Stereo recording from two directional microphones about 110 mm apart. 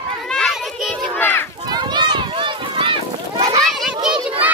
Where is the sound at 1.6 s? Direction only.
40° right (ahead or behind).